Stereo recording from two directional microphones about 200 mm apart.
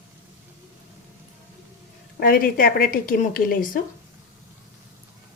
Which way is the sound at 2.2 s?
45° left (ahead or behind).